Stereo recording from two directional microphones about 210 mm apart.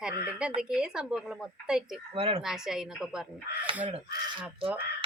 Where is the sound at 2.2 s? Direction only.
25° right (ahead or behind).